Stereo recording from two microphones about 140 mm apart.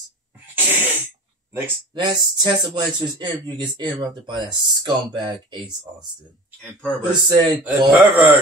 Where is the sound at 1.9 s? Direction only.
30° right (ahead or behind).